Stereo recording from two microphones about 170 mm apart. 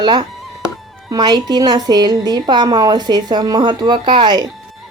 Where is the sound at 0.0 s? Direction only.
25° right (ahead or behind).